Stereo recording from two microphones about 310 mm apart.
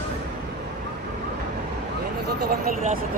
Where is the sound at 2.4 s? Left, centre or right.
Right.